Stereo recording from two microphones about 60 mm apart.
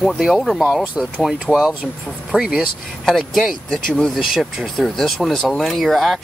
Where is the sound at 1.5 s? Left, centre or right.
Left.